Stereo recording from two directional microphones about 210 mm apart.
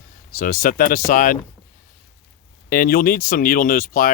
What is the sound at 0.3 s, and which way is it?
Speech, 45° left (ahead or behind).